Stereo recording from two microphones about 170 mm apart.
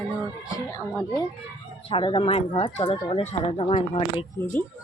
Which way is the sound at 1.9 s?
30° left (ahead or behind).